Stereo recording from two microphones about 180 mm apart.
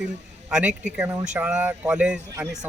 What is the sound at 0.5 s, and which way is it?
Speech, 5° right (ahead or behind).